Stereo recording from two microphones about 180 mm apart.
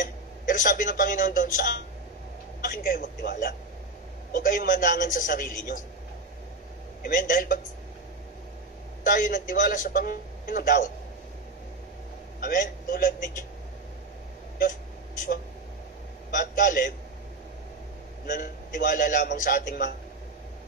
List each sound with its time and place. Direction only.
0.0 s a man's voice: 45° left (ahead or behind)
7.0 s a man's voice: 50° left (ahead or behind)
9.0 s a man's voice: 50° left (ahead or behind)
12.4 s a man's voice: 50° left (ahead or behind)
16.3 s a man's voice: 50° left (ahead or behind)
18.2 s a man's voice: 45° left (ahead or behind)